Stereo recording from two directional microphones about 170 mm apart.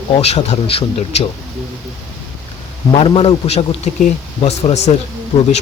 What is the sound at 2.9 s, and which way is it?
Speech, 35° left (ahead or behind).